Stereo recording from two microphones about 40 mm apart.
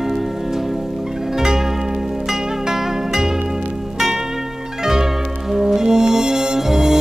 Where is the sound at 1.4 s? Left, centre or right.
Centre.